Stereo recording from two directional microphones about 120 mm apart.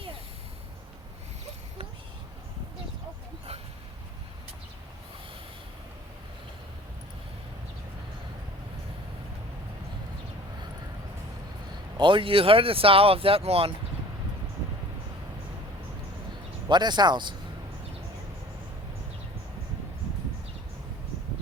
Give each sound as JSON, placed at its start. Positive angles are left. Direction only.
{"t": 11.9, "sound": "speech", "side_deg": -45}
{"t": 16.6, "sound": "speech", "side_deg": -40}